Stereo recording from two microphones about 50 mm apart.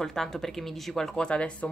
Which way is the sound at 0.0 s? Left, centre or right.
Centre.